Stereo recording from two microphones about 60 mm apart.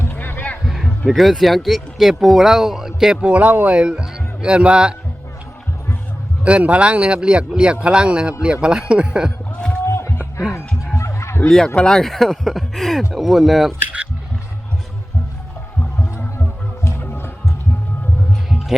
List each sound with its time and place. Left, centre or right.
0.0 s a sound: left
0.6 s music: centre
1.0 s speech: centre; by 3.8 s right
3.8 s speech: centre
6.4 s speech: centre
9.8 s a sound: left
10.9 s music: left
11.4 s speech: centre
17.0 s music: left